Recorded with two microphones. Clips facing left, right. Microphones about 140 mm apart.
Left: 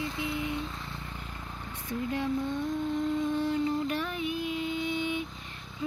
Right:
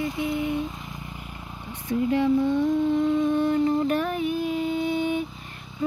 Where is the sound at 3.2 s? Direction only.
50° right (ahead or behind).